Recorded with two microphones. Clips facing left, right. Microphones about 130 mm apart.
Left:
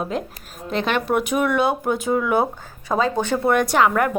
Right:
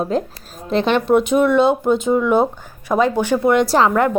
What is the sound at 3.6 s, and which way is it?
Speech, 30° right (ahead or behind).